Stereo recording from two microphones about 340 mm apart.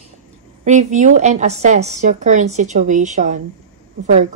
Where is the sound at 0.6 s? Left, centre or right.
Right.